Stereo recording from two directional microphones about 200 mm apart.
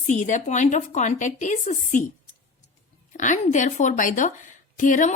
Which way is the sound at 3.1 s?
40° left (ahead or behind).